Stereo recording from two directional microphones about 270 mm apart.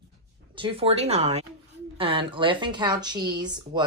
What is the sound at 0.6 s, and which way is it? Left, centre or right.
Speech, right.